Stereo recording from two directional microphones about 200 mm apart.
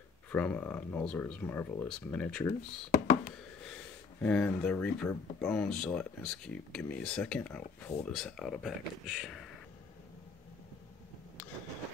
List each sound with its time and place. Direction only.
0.3 s speech: 5° left (ahead or behind)
2.9 s a sound: 45° left (ahead or behind)
4.2 s speech: 5° left (ahead or behind)